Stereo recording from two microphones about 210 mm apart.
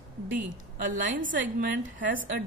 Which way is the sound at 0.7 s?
40° right (ahead or behind).